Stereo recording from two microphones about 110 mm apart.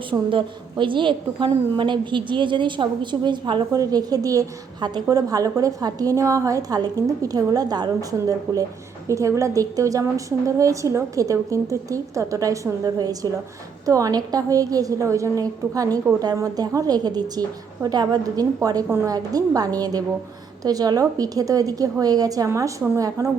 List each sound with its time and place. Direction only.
0.1 s a woman's voice: 50° right (ahead or behind); by 23.3 s 30° right (ahead or behind)